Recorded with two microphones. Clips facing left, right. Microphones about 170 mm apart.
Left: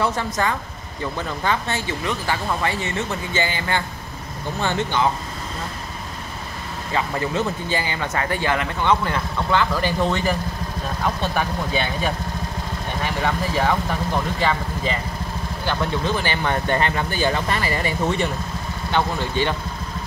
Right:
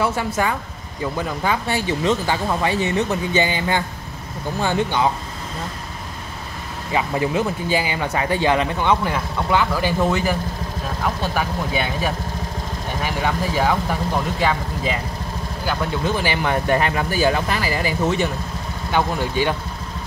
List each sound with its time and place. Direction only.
0.0 s speech: 10° right (ahead or behind)
6.9 s speech: 15° right (ahead or behind)
11.3 s speech: 5° right (ahead or behind)